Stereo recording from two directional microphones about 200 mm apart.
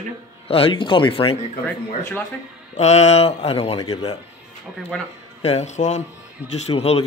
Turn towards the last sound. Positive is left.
turn(degrees=30)  # may be behind; listen again after turning